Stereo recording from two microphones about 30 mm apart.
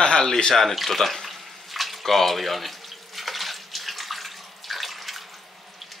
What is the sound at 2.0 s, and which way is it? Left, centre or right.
Water tap, centre.